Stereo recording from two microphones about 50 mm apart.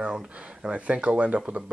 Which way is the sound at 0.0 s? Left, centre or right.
Centre.